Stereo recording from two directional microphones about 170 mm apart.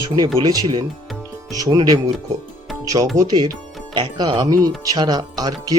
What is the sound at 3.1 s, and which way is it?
Speech, 25° right (ahead or behind).